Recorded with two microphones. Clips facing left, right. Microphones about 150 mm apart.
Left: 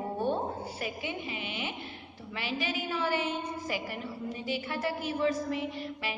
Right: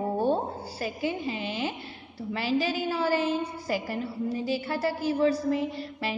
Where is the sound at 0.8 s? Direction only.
35° right (ahead or behind).